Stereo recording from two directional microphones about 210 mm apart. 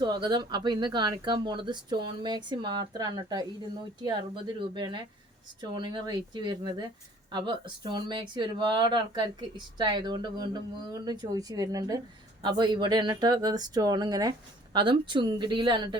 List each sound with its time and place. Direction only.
0.0 s speech: 20° right (ahead or behind)
4.7 s speech: 20° right (ahead or behind)